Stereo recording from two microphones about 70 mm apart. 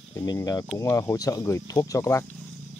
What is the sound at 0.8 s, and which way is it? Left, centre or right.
Speech, left.